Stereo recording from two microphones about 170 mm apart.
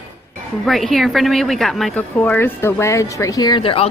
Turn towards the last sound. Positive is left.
turn(degrees=30)  # may be behind; listen again after turning